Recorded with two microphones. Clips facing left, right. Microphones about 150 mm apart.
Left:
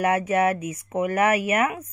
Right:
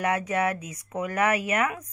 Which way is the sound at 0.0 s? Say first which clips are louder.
Left 5 dB; 30° left (ahead or behind).